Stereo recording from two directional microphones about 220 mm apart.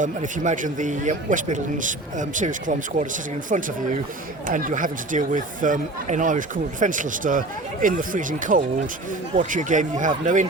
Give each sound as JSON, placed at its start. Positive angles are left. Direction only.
{"t": 0.0, "sound": "speech", "side_deg": -35}